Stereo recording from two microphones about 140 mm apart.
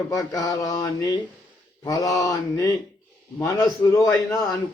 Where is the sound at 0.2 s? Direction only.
25° left (ahead or behind).